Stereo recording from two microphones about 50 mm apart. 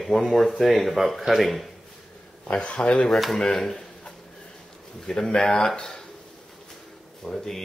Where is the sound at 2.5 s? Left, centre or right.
Left.